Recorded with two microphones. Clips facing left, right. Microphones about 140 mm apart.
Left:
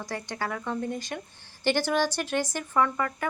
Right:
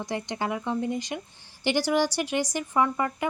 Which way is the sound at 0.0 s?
20° right (ahead or behind).